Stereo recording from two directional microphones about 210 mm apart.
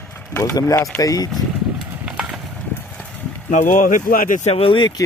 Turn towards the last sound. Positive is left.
turn(degrees=20)  # may be behind; listen again after turning